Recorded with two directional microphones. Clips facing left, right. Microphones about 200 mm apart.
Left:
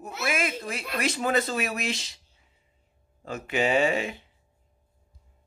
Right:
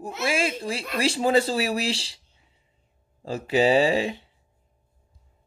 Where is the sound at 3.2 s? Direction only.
30° right (ahead or behind).